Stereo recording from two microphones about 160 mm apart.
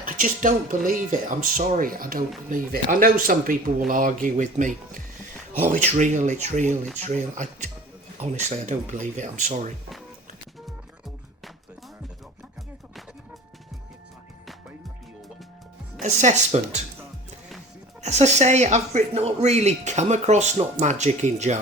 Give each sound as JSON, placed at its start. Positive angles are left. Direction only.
{"t": 0.0, "sound": "speech", "side_deg": -55}
{"t": 16.0, "sound": "speech", "side_deg": -45}
{"t": 18.0, "sound": "speech", "side_deg": -45}